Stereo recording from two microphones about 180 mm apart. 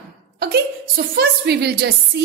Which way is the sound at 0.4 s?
60° right (ahead or behind).